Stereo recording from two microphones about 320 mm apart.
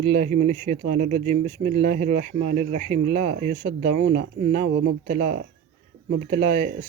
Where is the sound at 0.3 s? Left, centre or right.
Right.